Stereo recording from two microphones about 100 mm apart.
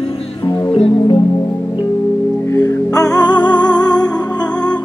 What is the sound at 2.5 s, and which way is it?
Music, 30° left (ahead or behind).